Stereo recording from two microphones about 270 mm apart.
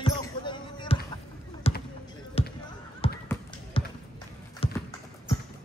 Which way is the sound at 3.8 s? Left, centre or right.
Centre.